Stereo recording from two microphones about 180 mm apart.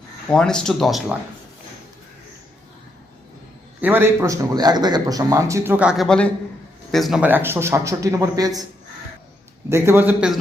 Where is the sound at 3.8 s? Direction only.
10° right (ahead or behind).